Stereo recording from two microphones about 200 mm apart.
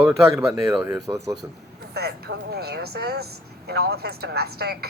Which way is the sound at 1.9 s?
55° right (ahead or behind).